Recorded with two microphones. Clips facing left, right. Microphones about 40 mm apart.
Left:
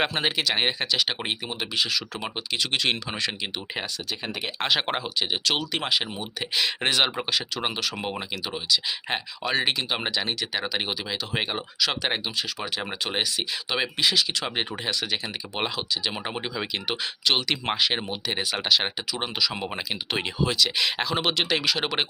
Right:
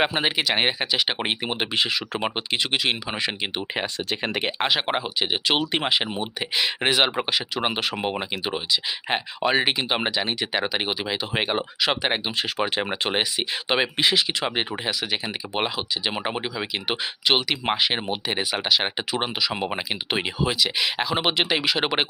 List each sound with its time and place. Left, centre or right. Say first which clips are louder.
0.0 s speech: right 2 dB; centre
1.5 s speech: right 3 dB; right
2.7 s speech: left 1 dB; centre
4.1 s speech: right 7 dB; right
4.6 s speech: even; centre
5.2 s speech: right 4 dB; right
6.6 s speech: right 2 dB; centre
7.7 s speech: right 3 dB; right
7.9 s speech: right 4 dB; centre
12.4 s speech: right 5 dB; right
12.8 s speech: right 4 dB; right; by 18.9 s centre
19.2 s speech: left 1 dB; right